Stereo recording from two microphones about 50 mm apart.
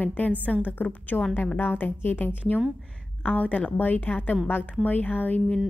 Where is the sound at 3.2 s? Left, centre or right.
Left.